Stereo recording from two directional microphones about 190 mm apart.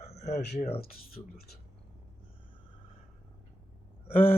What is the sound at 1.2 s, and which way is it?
Speech, 15° left (ahead or behind).